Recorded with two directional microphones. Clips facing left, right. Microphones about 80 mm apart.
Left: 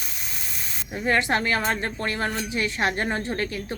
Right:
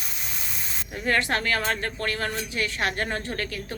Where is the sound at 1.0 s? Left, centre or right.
Centre.